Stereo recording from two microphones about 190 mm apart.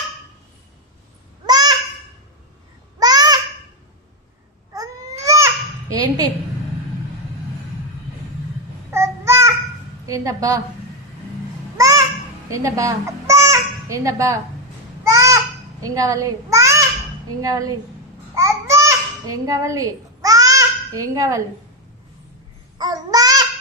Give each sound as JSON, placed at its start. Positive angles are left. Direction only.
{"t": 1.5, "sound": "a sound", "side_deg": -20}
{"t": 3.0, "sound": "babbling", "side_deg": -20}
{"t": 4.7, "sound": "baby cry", "side_deg": -15}
{"t": 5.9, "sound": "a woman's voice", "side_deg": -20}
{"t": 8.9, "sound": "child singing", "side_deg": -15}
{"t": 10.1, "sound": "a woman's voice", "side_deg": -20}
{"t": 11.8, "sound": "babbling", "side_deg": -15}
{"t": 12.5, "sound": "a child's voice", "side_deg": -15}
{"t": 15.0, "sound": "a sound", "side_deg": -15}
{"t": 15.8, "sound": "a child's voice", "side_deg": -15}
{"t": 18.3, "sound": "babbling", "side_deg": -15}
{"t": 22.8, "sound": "babbling", "side_deg": -20}